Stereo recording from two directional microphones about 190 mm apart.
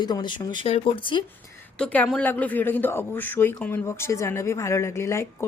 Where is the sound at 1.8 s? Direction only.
5° left (ahead or behind).